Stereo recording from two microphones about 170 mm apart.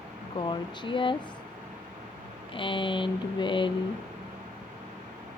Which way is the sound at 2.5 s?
30° left (ahead or behind).